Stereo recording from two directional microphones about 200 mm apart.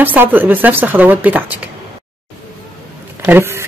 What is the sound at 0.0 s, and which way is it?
Speech, 10° right (ahead or behind).